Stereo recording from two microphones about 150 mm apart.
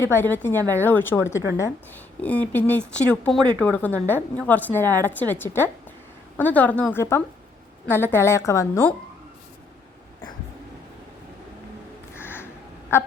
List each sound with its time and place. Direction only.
0.0 s speech: 15° left (ahead or behind)
12.1 s a sound: 15° left (ahead or behind)
12.9 s speech: 15° left (ahead or behind)